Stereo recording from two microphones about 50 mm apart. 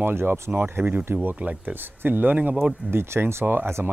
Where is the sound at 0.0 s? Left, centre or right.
Right.